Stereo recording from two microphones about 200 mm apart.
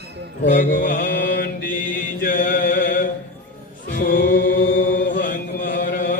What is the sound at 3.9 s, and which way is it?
Music, 45° left (ahead or behind).